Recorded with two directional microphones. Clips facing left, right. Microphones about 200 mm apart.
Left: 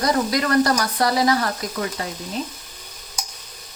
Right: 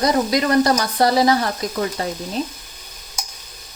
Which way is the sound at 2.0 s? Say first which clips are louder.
Right 5 dB; 35° right (ahead or behind).